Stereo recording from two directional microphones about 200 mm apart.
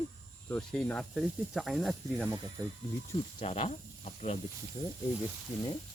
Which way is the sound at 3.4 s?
30° left (ahead or behind).